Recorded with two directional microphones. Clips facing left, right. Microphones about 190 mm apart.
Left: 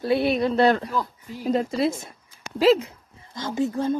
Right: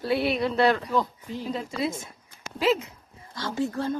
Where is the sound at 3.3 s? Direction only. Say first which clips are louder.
Left 3 dB; 20° left (ahead or behind).